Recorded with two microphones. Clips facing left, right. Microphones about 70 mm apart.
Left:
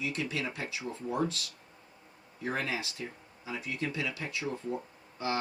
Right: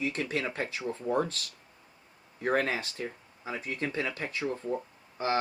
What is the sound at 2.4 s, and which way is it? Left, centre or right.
Speech, right.